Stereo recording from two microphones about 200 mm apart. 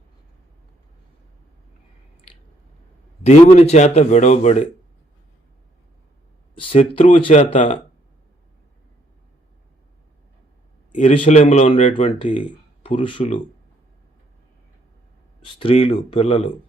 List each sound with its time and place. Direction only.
3.2 s speech: 35° left (ahead or behind)
6.6 s speech: 25° left (ahead or behind)
10.9 s speech: 35° left (ahead or behind)
15.5 s speech: 25° left (ahead or behind)